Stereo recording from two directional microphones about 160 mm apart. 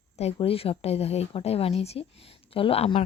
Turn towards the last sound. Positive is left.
turn(degrees=35)  # may be behind; listen again after turning